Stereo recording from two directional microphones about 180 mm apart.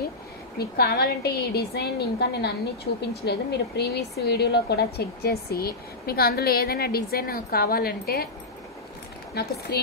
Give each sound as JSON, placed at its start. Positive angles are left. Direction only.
{"t": 0.6, "sound": "speech", "side_deg": 60}
{"t": 9.3, "sound": "speech", "side_deg": 60}